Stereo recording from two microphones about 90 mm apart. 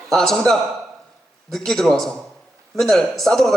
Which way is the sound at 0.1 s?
5° left (ahead or behind).